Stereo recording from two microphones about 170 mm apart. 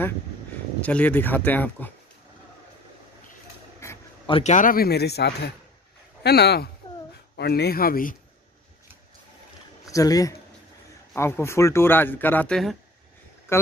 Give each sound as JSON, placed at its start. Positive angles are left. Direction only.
{"t": 0.8, "sound": "speech", "side_deg": 10}
{"t": 3.8, "sound": "a sound", "side_deg": 15}
{"t": 4.3, "sound": "speech", "side_deg": 40}
{"t": 9.8, "sound": "speech", "side_deg": 20}
{"t": 13.5, "sound": "speech", "side_deg": 15}